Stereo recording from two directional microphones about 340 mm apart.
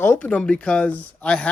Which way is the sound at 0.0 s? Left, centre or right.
Centre.